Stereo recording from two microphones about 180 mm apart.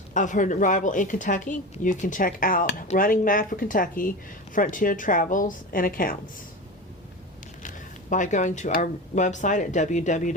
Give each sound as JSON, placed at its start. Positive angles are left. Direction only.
{"t": 0.1, "sound": "a woman's voice", "side_deg": 45}
{"t": 7.6, "sound": "speech", "side_deg": 45}